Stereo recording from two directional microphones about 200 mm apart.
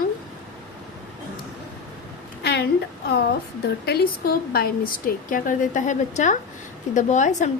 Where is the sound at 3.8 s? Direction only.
50° left (ahead or behind).